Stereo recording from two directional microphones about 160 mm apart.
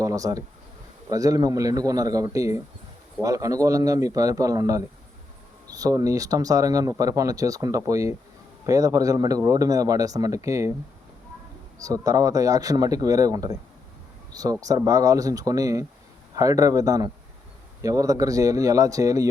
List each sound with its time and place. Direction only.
0.0 s speech: 20° right (ahead or behind)
11.8 s speech: 20° right (ahead or behind)